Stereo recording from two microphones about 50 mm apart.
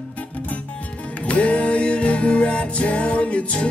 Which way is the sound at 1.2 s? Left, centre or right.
Left.